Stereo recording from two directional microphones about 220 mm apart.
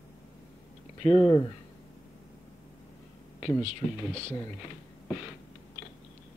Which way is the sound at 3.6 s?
30° right (ahead or behind).